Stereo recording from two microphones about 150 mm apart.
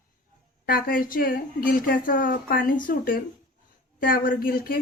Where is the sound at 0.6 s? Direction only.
75° left (ahead or behind).